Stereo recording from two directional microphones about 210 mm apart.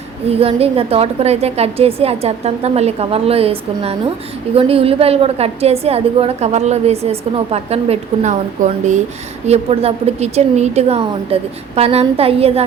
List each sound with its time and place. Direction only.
0.3 s a woman's voice: 30° right (ahead or behind)